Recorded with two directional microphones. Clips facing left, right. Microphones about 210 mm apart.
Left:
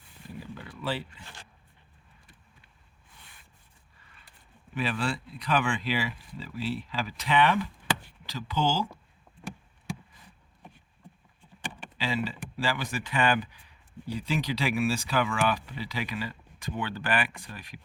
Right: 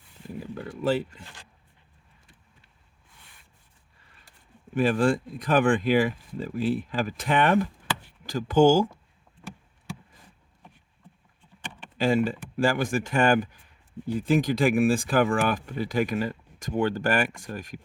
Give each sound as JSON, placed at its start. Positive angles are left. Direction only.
{"t": 0.3, "sound": "a sound", "side_deg": -45}
{"t": 4.3, "sound": "speech", "side_deg": -45}
{"t": 11.9, "sound": "speech", "side_deg": -50}